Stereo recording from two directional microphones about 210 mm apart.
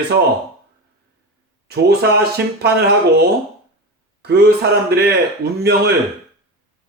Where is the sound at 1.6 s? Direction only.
50° right (ahead or behind).